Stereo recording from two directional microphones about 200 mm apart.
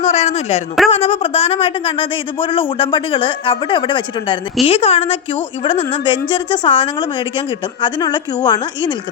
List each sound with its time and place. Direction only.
0.0 s speech: 30° left (ahead or behind)